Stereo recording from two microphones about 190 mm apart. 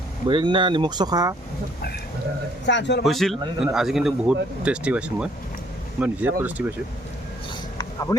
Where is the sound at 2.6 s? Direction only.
70° left (ahead or behind).